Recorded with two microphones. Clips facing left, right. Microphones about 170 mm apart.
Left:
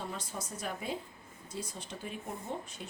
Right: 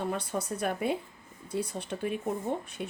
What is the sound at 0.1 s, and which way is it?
A woman's voice, 60° right (ahead or behind).